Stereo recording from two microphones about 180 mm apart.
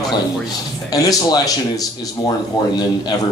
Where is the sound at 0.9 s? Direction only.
20° left (ahead or behind).